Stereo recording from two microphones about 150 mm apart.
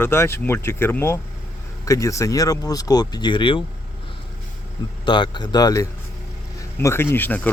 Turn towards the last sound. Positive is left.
turn(degrees=10)  # may be behind; listen again after turning